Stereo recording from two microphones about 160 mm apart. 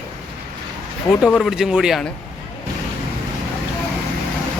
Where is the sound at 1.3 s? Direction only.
Centre (ahead or behind).